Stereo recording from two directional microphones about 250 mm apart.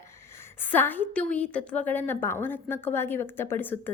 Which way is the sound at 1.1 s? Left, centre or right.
Centre.